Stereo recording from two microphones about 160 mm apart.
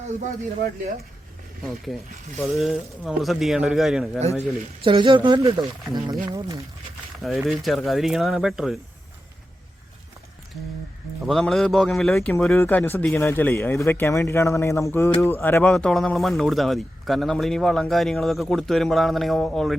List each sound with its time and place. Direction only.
1.6 s speech: centre (ahead or behind)
4.2 s speech: 40° right (ahead or behind); by 6.1 s 25° right (ahead or behind)
7.2 s speech: centre (ahead or behind)
11.3 s a man's voice: centre (ahead or behind)